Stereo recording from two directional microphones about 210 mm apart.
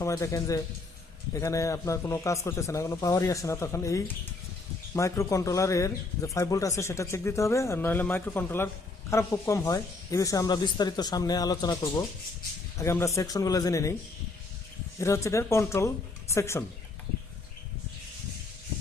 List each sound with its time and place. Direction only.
0.0 s speech: 15° left (ahead or behind)
14.9 s speech: 15° left (ahead or behind)